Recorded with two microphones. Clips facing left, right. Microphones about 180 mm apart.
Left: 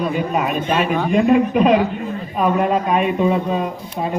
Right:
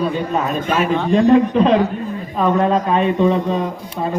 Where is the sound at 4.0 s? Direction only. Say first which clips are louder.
Right 1 dB; 20° left (ahead or behind).